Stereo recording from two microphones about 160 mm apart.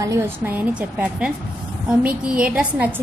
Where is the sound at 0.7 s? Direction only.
5° right (ahead or behind).